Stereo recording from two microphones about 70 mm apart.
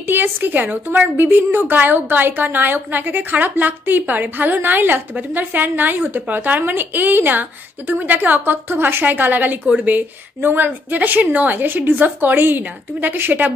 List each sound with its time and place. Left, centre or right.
0.0 s a woman's voice: right